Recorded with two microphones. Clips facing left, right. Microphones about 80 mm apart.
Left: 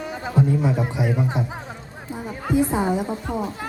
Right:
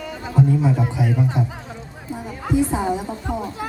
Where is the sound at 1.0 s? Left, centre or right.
Centre.